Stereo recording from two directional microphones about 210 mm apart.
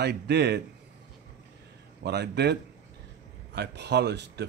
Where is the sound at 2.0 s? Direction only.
50° right (ahead or behind).